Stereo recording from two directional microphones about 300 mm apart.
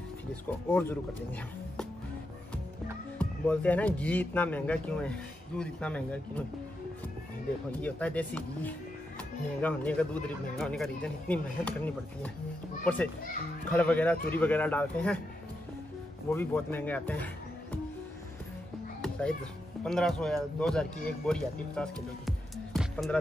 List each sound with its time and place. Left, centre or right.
0.5 s speech: centre
3.2 s speech: centre
7.8 s speech: centre
16.3 s speech: centre
18.9 s music: centre
19.8 s speech: centre